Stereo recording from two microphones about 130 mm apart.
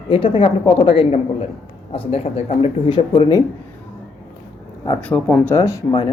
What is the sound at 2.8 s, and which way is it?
Speech, 40° left (ahead or behind).